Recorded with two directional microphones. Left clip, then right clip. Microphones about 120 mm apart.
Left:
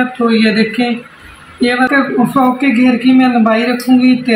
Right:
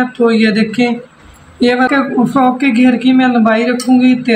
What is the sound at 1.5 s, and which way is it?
Speech, 45° right (ahead or behind).